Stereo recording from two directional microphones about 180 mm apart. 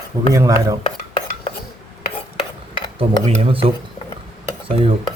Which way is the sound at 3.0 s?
30° right (ahead or behind).